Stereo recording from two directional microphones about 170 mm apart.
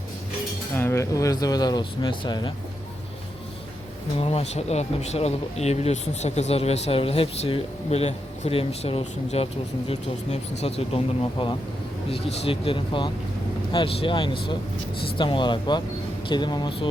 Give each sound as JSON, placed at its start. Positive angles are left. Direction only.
{"t": 0.8, "sound": "speech", "side_deg": 15}
{"t": 4.2, "sound": "speech", "side_deg": 35}